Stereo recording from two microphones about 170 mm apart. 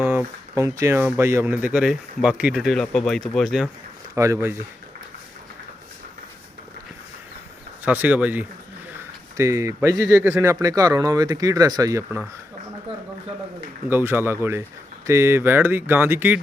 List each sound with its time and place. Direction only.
0.0 s speech: 10° right (ahead or behind)
4.1 s speech: 20° right (ahead or behind)
7.9 s speech: 10° right (ahead or behind)
13.9 s speech: 15° right (ahead or behind)